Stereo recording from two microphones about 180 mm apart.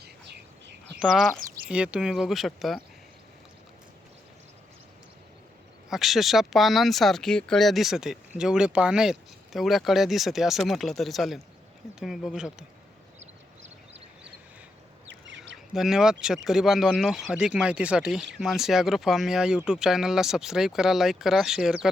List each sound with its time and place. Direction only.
0.9 s speech: centre (ahead or behind)
1.4 s a sound: 55° right (ahead or behind)
1.7 s speech: 5° right (ahead or behind)
5.9 s speech: centre (ahead or behind)
15.3 s duck: 90° right
15.7 s speech: centre (ahead or behind)